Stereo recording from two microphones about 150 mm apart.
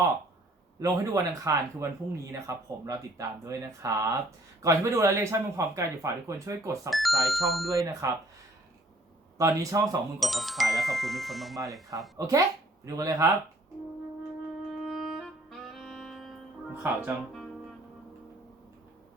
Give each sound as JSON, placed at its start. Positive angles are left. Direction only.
{"t": 0.8, "sound": "speech", "side_deg": -20}
{"t": 6.9, "sound": "speech", "side_deg": 0}
{"t": 8.0, "sound": "speech", "side_deg": -25}
{"t": 9.4, "sound": "speech", "side_deg": -20}
{"t": 10.2, "sound": "speech", "side_deg": 0}
{"t": 12.1, "sound": "speech", "side_deg": -20}
{"t": 14.7, "sound": "music", "side_deg": 0}
{"t": 16.7, "sound": "speech", "side_deg": -10}